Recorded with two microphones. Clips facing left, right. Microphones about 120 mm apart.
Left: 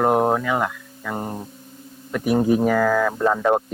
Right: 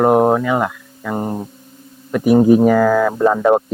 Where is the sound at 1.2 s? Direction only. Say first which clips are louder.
Right 7 dB; 50° right (ahead or behind).